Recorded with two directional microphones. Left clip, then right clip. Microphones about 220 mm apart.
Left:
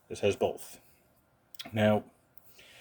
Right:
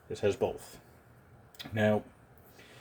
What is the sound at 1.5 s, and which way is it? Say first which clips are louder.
Speech: left 2 dB; 25° left (ahead or behind).